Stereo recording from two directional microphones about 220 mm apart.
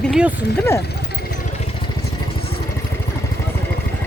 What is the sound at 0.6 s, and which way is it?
Speech, 10° left (ahead or behind).